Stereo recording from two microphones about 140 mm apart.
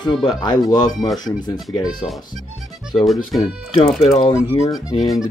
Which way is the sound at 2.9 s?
Centre (ahead or behind).